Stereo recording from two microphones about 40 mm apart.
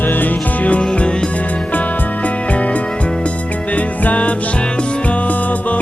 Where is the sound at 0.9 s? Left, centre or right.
Left.